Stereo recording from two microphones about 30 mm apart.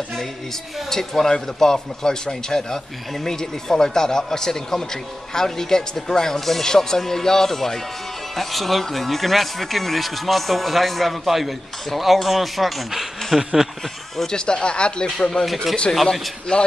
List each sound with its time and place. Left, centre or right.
0.8 s speech: centre
13.4 s speech: centre
14.2 s speech: left
15.1 s speech: left
15.4 s speech: centre
16.5 s speech: left